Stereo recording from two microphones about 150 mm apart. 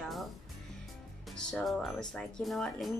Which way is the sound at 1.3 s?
5° left (ahead or behind).